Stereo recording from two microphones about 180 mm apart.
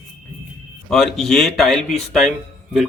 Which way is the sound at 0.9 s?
Centre (ahead or behind).